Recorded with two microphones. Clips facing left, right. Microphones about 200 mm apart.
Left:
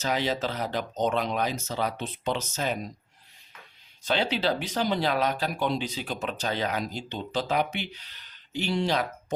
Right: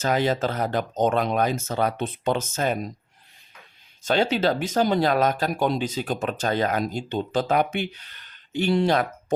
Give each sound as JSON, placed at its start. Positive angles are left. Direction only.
{"t": 0.0, "sound": "speech", "side_deg": -50}
{"t": 4.0, "sound": "speech", "side_deg": -45}